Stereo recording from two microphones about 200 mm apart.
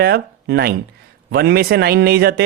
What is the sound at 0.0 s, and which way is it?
A man's voice, 55° right (ahead or behind).